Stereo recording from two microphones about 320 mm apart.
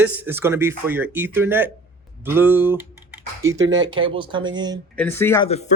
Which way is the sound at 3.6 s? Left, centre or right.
Right.